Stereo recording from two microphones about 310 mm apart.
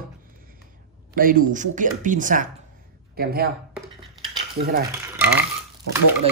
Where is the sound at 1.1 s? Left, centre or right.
Right.